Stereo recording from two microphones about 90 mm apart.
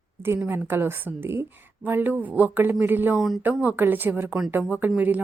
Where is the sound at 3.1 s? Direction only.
Centre (ahead or behind).